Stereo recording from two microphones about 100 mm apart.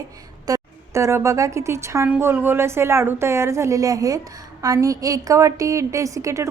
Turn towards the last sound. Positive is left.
turn(degrees=-30)  # may be behind; listen again after turning